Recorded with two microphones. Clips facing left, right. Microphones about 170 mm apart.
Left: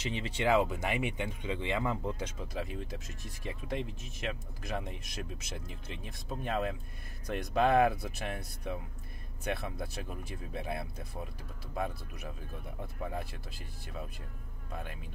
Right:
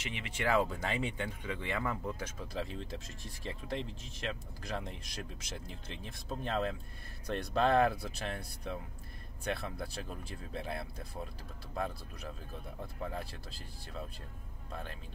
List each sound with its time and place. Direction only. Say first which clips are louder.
0.1 s speech: left 3 dB; 30° left (ahead or behind)
0.5 s speech: left 3 dB; 20° left (ahead or behind)
14.7 s speech: left 1 dB; 10° left (ahead or behind)